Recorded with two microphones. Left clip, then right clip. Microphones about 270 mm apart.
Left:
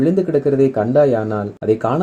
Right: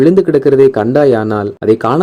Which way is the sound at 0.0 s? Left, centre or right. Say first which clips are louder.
Right 7 dB; right.